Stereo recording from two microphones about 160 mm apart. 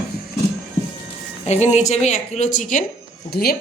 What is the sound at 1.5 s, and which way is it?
A woman's voice, 45° left (ahead or behind).